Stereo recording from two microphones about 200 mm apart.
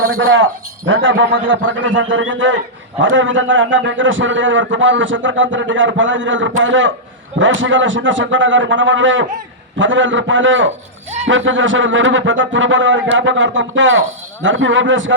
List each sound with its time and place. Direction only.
0.0 s a man's voice: 90° right; by 15.1 s 70° right (ahead or behind)